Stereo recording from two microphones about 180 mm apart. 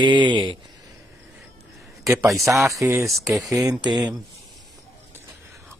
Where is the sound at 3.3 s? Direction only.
Centre (ahead or behind).